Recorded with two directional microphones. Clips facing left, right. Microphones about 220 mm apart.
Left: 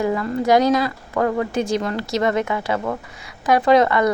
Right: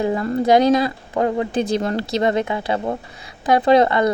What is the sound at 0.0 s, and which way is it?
A woman's voice, 30° right (ahead or behind).